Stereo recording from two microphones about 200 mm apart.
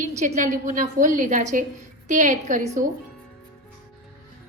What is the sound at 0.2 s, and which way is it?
A woman's voice, 35° right (ahead or behind).